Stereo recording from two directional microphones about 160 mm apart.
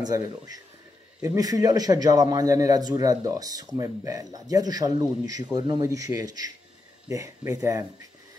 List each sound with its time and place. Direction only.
0.0 s a man's voice: 25° right (ahead or behind)